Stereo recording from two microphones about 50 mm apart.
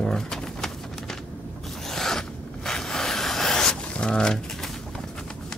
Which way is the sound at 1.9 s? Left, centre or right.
Centre.